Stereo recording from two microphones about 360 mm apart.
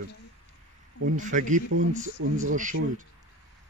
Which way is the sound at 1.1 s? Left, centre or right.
Right.